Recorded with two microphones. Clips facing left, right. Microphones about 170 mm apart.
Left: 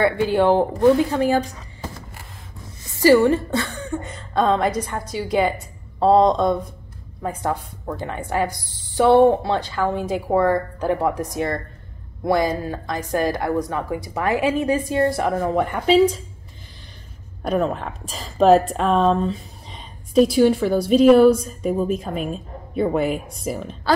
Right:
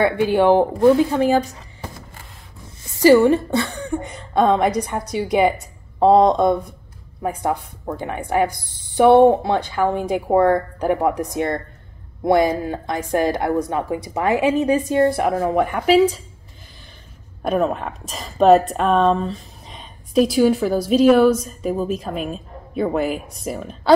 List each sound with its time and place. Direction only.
0.0 s a woman's voice: 15° right (ahead or behind)
3.0 s a woman's voice: 20° right (ahead or behind)
17.4 s a woman's voice: 5° right (ahead or behind)